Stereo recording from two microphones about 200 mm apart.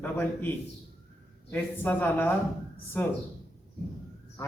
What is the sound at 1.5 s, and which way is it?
Speech, 10° left (ahead or behind).